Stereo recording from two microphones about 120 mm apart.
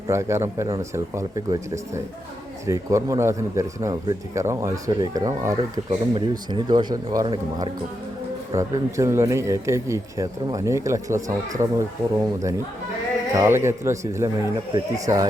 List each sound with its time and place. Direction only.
0.1 s speech: 20° right (ahead or behind)
5.9 s speech: 40° right (ahead or behind)
8.5 s speech: 25° right (ahead or behind)